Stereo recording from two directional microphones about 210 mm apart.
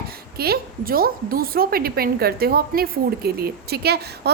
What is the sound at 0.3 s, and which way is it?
A woman's voice, 45° right (ahead or behind).